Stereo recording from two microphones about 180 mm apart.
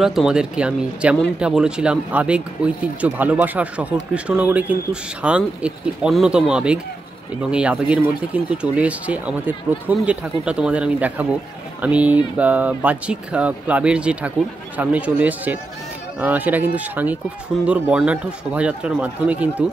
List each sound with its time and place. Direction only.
0.0 s speech: centre (ahead or behind)